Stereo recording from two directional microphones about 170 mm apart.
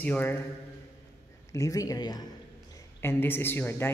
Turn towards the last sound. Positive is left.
turn(degrees=15)  # may be behind; listen again after turning